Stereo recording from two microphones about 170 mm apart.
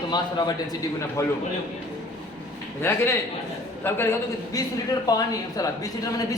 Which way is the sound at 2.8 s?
15° left (ahead or behind).